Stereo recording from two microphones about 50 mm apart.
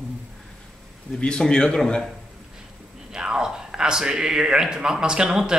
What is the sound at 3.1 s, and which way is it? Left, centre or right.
Speech, centre.